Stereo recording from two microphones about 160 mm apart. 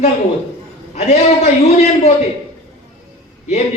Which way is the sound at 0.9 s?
45° left (ahead or behind).